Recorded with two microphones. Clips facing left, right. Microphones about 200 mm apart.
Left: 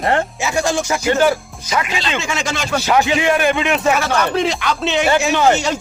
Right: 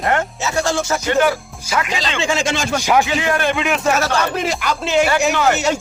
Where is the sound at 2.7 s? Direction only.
10° right (ahead or behind).